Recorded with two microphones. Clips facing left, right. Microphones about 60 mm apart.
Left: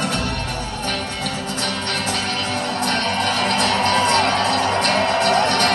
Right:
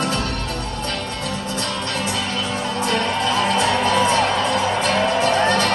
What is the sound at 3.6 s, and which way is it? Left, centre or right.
Music, left.